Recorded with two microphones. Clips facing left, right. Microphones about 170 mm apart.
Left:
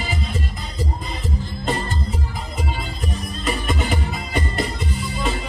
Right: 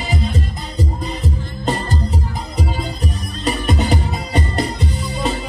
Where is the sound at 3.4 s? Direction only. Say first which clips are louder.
Right 5 dB; 40° right (ahead or behind).